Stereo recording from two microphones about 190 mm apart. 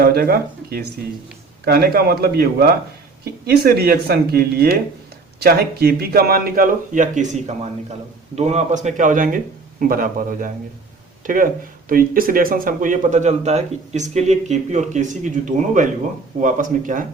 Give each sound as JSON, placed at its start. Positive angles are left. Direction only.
{"t": 0.0, "sound": "a man's voice", "side_deg": -55}